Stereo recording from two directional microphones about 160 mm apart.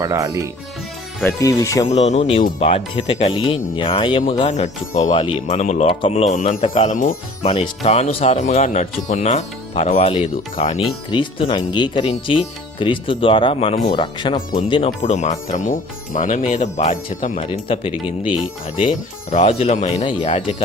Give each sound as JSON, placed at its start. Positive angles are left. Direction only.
{"t": 0.0, "sound": "speech", "side_deg": -20}
{"t": 1.2, "sound": "speech", "side_deg": 20}
{"t": 1.9, "sound": "speech", "side_deg": 45}
{"t": 4.4, "sound": "speech", "side_deg": 45}
{"t": 6.3, "sound": "speech", "side_deg": 50}
{"t": 7.4, "sound": "speech", "side_deg": 40}
{"t": 14.8, "sound": "speech", "side_deg": 45}
{"t": 17.4, "sound": "speech", "side_deg": 35}
{"t": 19.3, "sound": "speech", "side_deg": 45}